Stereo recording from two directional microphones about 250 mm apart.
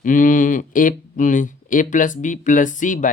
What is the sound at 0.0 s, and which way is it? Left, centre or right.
Speech, left.